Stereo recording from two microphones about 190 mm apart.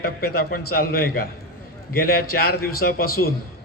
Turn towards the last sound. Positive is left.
turn(degrees=55)  # may be behind; listen again after turning